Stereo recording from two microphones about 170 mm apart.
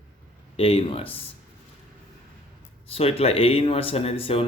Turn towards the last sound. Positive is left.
turn(degrees=35)  # may be behind; listen again after turning